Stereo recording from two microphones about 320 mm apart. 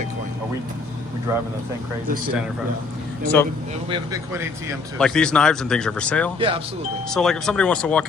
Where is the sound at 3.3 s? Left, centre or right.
Centre.